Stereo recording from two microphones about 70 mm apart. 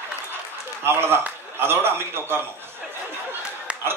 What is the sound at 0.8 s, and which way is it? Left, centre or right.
A man's voice, right.